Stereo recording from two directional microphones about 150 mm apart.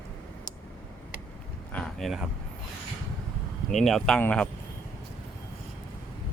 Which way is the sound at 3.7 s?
Centre (ahead or behind).